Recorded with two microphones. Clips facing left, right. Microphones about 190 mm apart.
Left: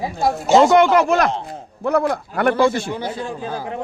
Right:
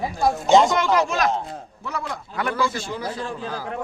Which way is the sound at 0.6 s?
60° left (ahead or behind).